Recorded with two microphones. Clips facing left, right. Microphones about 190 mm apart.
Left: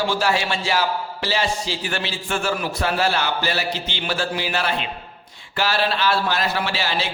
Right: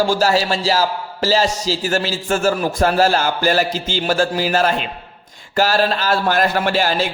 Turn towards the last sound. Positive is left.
turn(degrees=-45)  # may be behind; listen again after turning